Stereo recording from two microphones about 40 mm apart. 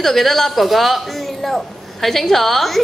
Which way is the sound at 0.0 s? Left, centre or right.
Centre.